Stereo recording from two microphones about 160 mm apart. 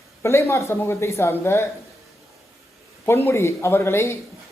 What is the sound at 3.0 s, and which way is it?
Speech, 15° left (ahead or behind).